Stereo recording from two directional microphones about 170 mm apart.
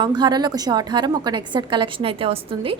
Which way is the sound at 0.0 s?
25° right (ahead or behind).